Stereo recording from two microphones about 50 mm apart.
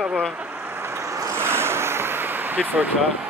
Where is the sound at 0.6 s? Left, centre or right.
Right.